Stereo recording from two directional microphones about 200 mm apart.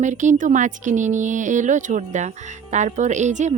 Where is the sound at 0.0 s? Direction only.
40° right (ahead or behind).